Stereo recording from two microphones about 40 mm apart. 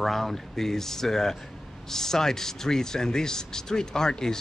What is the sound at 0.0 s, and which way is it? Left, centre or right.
Speech, centre.